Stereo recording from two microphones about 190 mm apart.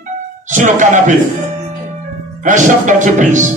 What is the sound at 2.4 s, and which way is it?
A man's voice, 40° right (ahead or behind).